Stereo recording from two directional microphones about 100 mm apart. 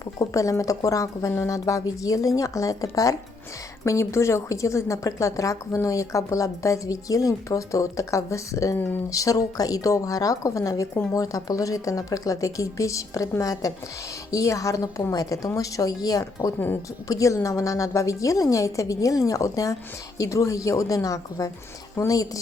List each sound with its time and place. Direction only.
0.2 s speech: 30° left (ahead or behind)